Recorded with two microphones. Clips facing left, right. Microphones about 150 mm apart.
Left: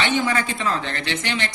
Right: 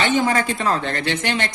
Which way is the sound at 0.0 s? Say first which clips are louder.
Right 3 dB; 40° right (ahead or behind).